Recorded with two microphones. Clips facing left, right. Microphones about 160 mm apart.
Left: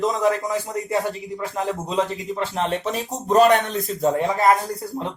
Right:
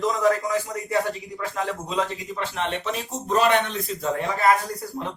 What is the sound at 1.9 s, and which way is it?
Speech, 35° left (ahead or behind).